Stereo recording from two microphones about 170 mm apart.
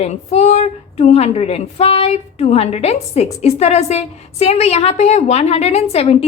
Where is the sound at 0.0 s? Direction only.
40° left (ahead or behind).